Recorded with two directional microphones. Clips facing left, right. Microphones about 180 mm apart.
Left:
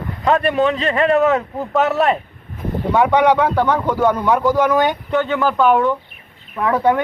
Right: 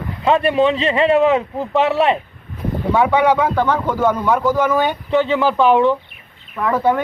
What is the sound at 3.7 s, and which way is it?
Speech, 15° left (ahead or behind).